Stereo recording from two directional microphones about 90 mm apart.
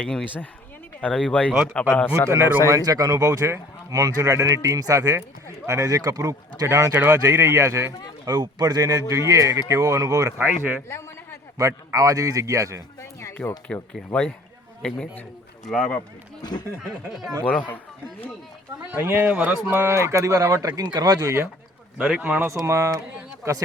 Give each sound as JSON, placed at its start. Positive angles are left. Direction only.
{"t": 0.0, "sound": "speech", "side_deg": 10}
{"t": 2.3, "sound": "speech", "side_deg": -30}
{"t": 8.2, "sound": "speech", "side_deg": -50}
{"t": 10.3, "sound": "speech", "side_deg": -20}
{"t": 11.9, "sound": "speech", "side_deg": -40}
{"t": 13.4, "sound": "speech", "side_deg": 10}
{"t": 14.8, "sound": "speech", "side_deg": 10}
{"t": 16.4, "sound": "speech", "side_deg": 50}
{"t": 17.4, "sound": "speech", "side_deg": 20}
{"t": 18.9, "sound": "speech", "side_deg": -25}
{"t": 22.0, "sound": "speech", "side_deg": -5}
{"t": 22.4, "sound": "speech", "side_deg": -35}